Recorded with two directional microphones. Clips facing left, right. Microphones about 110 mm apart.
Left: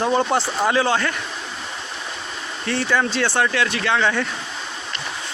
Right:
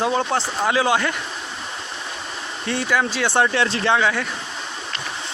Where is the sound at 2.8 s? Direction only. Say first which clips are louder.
Left 1 dB; 5° right (ahead or behind).